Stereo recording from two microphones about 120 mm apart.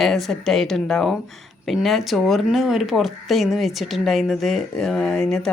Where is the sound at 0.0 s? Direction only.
Centre (ahead or behind).